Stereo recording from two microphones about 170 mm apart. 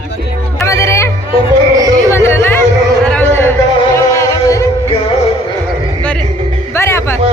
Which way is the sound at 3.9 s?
20° left (ahead or behind).